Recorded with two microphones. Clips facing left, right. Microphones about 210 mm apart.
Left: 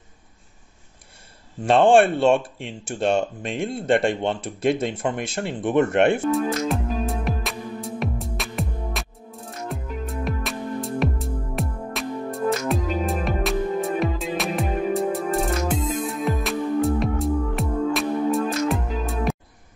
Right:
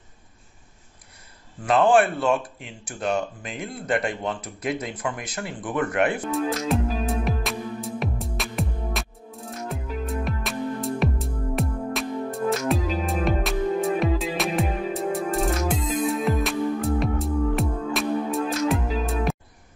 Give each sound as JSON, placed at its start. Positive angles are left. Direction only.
{"t": 1.7, "sound": "speech", "side_deg": 30}
{"t": 6.3, "sound": "music", "side_deg": 0}